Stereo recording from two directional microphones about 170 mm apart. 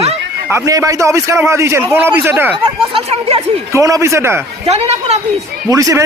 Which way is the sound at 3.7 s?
20° right (ahead or behind).